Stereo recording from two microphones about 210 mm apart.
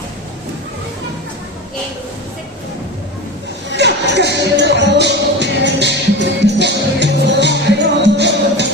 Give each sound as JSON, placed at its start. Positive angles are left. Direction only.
{"t": 3.7, "sound": "music", "side_deg": -55}